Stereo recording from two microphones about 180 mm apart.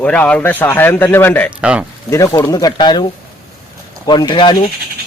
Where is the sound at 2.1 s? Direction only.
15° left (ahead or behind).